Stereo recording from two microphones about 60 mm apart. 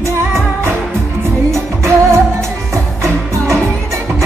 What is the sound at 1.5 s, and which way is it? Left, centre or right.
Music, right.